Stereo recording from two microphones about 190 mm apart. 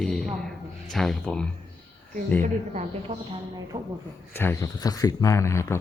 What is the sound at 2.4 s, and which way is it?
A woman's voice, 40° right (ahead or behind).